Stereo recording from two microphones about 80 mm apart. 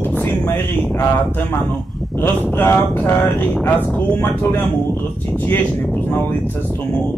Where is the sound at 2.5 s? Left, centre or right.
Left.